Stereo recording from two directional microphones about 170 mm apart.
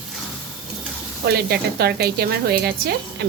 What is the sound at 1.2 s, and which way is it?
A woman's voice, 70° right (ahead or behind).